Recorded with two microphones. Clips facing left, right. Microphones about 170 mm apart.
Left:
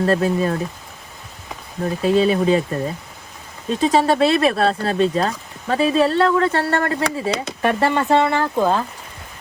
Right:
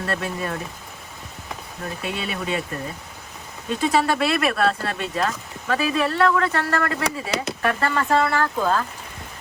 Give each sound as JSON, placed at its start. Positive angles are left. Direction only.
{"t": 0.0, "sound": "speech", "side_deg": 35}
{"t": 1.8, "sound": "speech", "side_deg": 35}
{"t": 3.8, "sound": "speech", "side_deg": 30}